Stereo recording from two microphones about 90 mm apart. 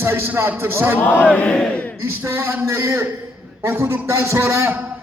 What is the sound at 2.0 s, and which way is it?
A man's voice, 30° right (ahead or behind).